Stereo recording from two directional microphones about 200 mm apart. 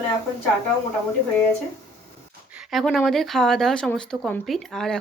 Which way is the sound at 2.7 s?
Centre (ahead or behind).